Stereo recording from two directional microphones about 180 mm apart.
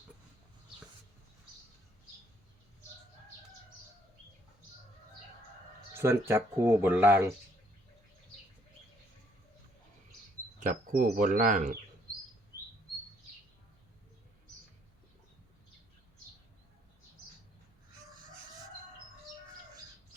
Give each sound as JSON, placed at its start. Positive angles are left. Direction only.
{"t": 5.9, "sound": "speech", "side_deg": -15}
{"t": 10.6, "sound": "speech", "side_deg": -45}